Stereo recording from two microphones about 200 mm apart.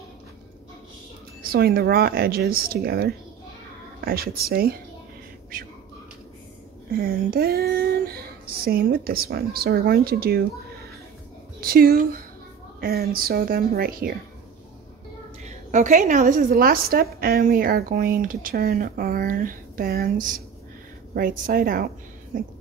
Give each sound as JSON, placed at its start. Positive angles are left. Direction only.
{"t": 1.4, "sound": "a woman's voice", "side_deg": -50}
{"t": 7.0, "sound": "a woman's voice", "side_deg": -45}
{"t": 15.4, "sound": "a woman's voice", "side_deg": -40}